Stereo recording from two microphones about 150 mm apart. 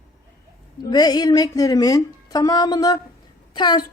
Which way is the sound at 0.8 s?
25° left (ahead or behind).